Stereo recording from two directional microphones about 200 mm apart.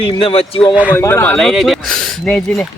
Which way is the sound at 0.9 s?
15° left (ahead or behind).